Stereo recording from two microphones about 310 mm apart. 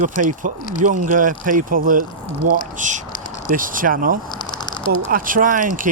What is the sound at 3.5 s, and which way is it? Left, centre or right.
Speech, right.